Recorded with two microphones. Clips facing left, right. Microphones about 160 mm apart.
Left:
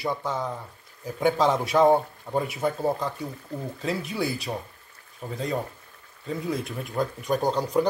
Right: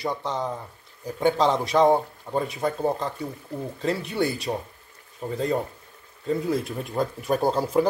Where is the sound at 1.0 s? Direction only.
5° left (ahead or behind).